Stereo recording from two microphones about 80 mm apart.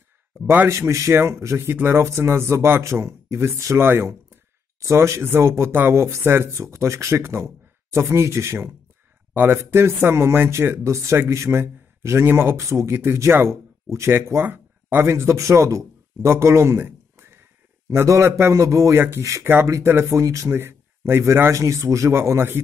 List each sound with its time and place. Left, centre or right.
0.7 s speech: right
3.8 s speech: right
16.8 s a sound: right
18.0 s speech: right
18.9 s speech: right
20.5 s speech: right